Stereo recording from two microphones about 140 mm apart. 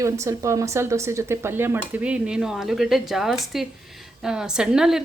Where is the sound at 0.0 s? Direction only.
20° right (ahead or behind).